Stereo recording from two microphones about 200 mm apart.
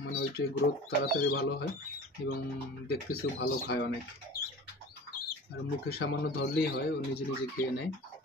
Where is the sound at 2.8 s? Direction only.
50° left (ahead or behind).